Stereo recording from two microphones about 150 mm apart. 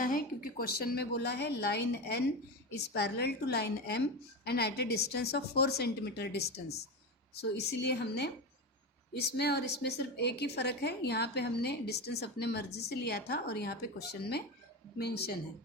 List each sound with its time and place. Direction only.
0.6 s a woman's voice: 90° left